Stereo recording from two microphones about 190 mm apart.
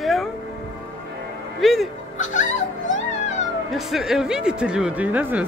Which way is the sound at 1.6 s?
Centre (ahead or behind).